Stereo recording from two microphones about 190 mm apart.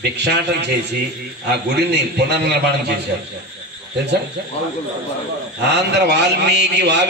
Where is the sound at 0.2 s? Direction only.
60° right (ahead or behind).